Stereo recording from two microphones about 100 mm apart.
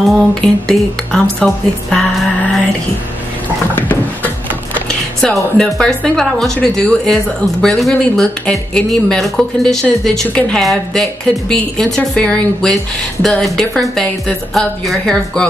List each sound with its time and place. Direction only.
0.0 s speech: 5° left (ahead or behind)
3.7 s a sound: 20° left (ahead or behind)
4.7 s speech: 10° left (ahead or behind)